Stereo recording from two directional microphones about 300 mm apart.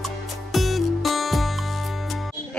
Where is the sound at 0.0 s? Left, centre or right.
Centre.